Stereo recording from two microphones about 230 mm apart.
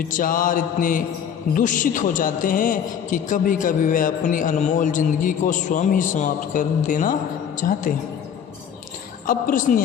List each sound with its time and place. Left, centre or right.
0.0 s a man's voice: left
9.2 s a man's voice: left